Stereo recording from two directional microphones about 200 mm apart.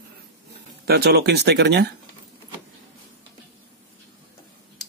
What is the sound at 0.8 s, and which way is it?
Speech, 55° right (ahead or behind).